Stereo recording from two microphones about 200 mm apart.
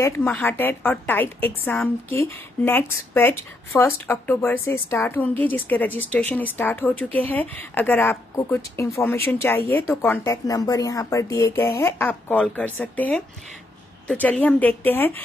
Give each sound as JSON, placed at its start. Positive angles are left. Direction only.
{"t": 0.0, "sound": "a woman's voice", "side_deg": 10}